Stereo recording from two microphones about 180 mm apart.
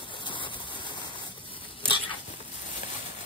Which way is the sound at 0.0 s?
25° left (ahead or behind).